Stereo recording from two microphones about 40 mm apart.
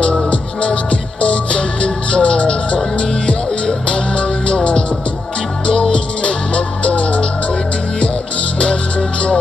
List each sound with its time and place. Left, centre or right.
0.3 s music: left
5.7 s music: left